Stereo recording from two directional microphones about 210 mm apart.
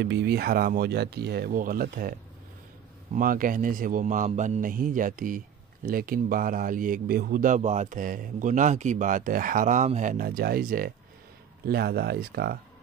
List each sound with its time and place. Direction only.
0.0 s speech: 55° right (ahead or behind)
3.2 s speech: 40° right (ahead or behind)